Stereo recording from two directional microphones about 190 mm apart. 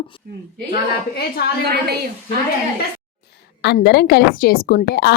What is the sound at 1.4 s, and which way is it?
Speech, 55° left (ahead or behind).